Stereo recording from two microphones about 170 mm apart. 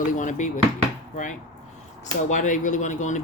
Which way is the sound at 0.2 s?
45° left (ahead or behind).